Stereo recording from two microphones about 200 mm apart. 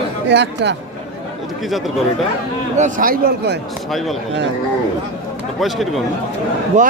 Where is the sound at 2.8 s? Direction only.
45° right (ahead or behind).